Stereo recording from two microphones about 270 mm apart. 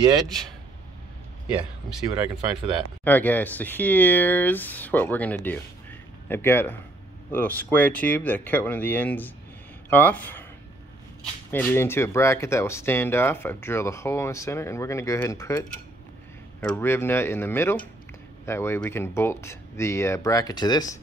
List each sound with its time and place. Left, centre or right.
2.0 s speech: centre
3.0 s speech: centre
11.5 s speech: centre
16.6 s speech: centre